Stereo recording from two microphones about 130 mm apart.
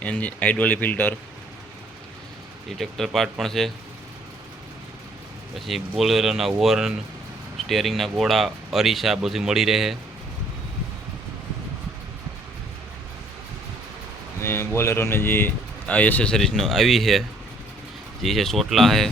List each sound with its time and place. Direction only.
0.0 s a man's voice: 10° left (ahead or behind)
2.6 s speech: centre (ahead or behind)
6.0 s speech: centre (ahead or behind)
14.4 s a sound: 20° left (ahead or behind)
14.8 s a man's voice: 20° left (ahead or behind); by 19.1 s centre (ahead or behind)